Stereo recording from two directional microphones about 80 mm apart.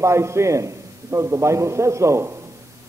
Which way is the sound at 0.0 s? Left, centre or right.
Right.